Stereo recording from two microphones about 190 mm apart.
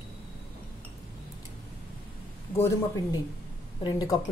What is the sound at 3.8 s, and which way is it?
Speech, 20° left (ahead or behind).